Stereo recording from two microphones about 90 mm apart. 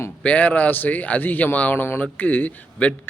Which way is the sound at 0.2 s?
15° left (ahead or behind).